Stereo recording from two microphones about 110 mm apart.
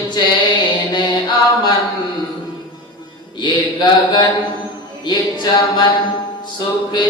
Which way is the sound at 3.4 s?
45° left (ahead or behind).